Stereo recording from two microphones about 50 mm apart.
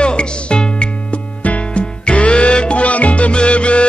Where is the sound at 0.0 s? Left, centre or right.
Centre.